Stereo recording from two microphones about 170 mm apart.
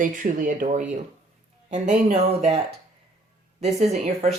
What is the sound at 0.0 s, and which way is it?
Speech, 50° right (ahead or behind).